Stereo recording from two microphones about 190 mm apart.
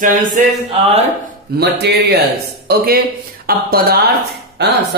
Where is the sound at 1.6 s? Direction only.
55° right (ahead or behind).